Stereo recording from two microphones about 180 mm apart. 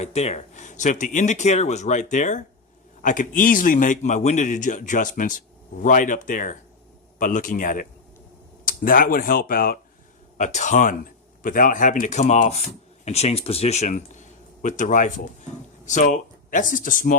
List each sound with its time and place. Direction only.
0.0 s a man's voice: 35° left (ahead or behind); by 9.7 s 55° left (ahead or behind)
10.3 s a man's voice: 40° left (ahead or behind)